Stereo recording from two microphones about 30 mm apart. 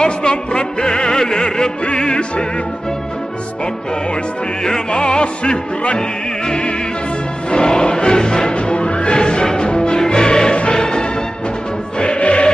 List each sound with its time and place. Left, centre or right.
0.0 s music: left
4.9 s music: left
5.9 s music: left
8.5 s music: left